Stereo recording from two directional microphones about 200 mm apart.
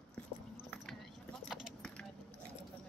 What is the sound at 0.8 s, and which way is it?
Keys jangling, centre (ahead or behind).